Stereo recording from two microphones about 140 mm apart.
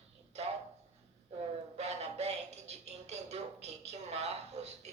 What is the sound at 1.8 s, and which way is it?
Music, 50° right (ahead or behind).